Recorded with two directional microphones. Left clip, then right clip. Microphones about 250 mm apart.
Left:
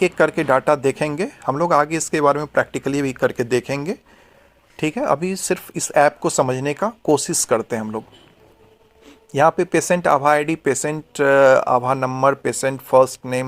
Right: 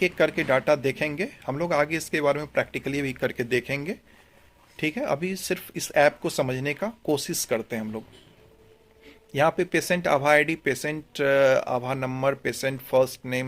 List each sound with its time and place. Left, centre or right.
0.0 s speech: centre
9.0 s speech: centre